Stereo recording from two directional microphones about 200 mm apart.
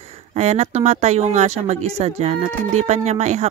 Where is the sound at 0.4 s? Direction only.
35° right (ahead or behind).